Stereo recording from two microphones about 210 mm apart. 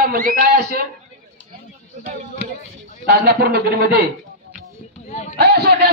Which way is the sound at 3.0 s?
50° right (ahead or behind).